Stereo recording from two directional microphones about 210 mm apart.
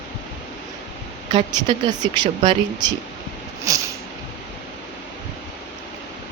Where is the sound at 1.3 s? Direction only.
20° right (ahead or behind).